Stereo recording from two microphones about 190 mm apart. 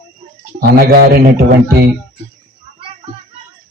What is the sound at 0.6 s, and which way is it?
Speech, 55° right (ahead or behind).